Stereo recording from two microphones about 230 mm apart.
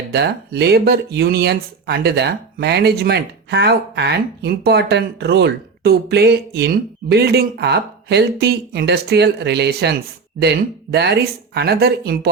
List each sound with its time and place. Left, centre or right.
0.1 s speech: right
10.9 s speech: right